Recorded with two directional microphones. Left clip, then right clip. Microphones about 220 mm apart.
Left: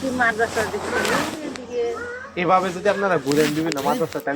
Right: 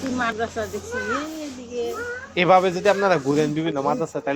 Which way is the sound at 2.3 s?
20° right (ahead or behind).